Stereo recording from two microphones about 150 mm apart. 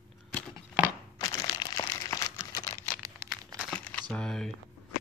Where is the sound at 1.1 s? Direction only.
25° left (ahead or behind).